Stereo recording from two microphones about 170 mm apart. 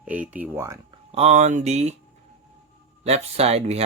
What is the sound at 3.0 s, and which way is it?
Speech, 40° right (ahead or behind).